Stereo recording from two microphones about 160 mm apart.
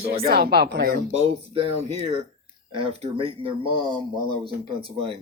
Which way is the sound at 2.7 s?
35° right (ahead or behind).